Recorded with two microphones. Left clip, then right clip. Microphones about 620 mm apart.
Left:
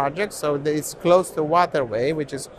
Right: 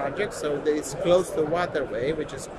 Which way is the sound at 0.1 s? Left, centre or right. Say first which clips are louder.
Left 3 dB; left.